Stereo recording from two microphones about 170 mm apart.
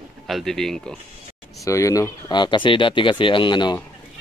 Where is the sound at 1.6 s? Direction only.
20° left (ahead or behind).